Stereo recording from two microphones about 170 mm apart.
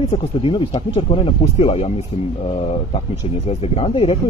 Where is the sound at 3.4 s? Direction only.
35° left (ahead or behind).